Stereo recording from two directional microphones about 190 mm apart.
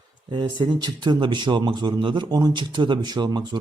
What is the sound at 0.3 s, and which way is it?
A man's voice, 25° right (ahead or behind).